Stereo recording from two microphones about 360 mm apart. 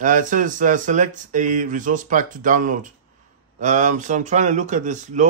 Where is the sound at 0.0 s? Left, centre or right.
Right.